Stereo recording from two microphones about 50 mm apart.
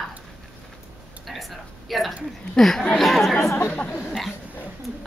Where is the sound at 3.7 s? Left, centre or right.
Left.